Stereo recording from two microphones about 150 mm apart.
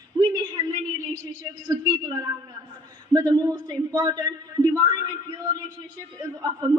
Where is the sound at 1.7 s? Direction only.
25° right (ahead or behind).